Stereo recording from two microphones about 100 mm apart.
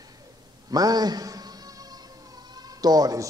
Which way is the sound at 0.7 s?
40° right (ahead or behind).